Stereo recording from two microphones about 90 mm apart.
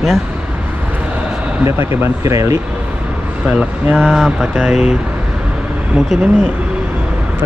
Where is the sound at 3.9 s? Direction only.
Centre (ahead or behind).